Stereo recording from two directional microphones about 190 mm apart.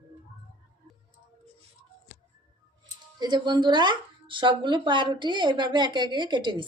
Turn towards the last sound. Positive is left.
turn(degrees=-25)  # may be behind; listen again after turning